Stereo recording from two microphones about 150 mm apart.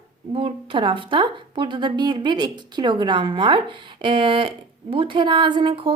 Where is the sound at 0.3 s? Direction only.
35° right (ahead or behind).